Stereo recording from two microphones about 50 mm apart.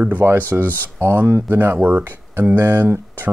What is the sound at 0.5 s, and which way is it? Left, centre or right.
Speech, right.